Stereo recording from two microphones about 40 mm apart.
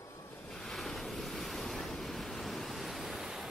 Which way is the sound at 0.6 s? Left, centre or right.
Centre.